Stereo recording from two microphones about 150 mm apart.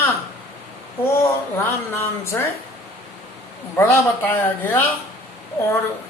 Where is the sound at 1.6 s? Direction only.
15° left (ahead or behind).